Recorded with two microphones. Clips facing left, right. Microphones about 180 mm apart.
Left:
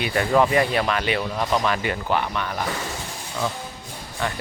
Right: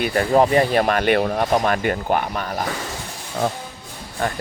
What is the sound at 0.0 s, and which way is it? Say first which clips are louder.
Speech: right 3 dB; 40° right (ahead or behind).